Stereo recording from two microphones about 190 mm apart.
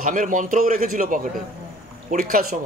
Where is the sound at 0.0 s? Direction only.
45° right (ahead or behind).